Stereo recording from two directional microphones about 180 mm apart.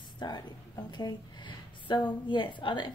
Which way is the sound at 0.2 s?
25° left (ahead or behind).